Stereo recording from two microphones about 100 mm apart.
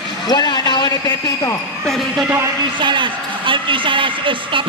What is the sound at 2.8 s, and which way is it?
A woman's voice, 55° right (ahead or behind).